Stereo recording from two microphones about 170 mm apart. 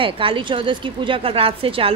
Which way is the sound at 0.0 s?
30° right (ahead or behind).